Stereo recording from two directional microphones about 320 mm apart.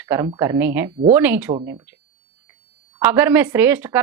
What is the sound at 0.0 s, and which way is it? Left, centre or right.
A woman's voice, centre.